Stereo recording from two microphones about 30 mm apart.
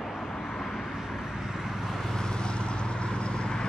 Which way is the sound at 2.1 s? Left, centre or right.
Left.